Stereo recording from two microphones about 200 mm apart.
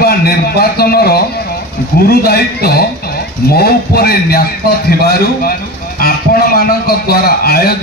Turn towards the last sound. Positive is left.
turn(degrees=50)  # may be behind; listen again after turning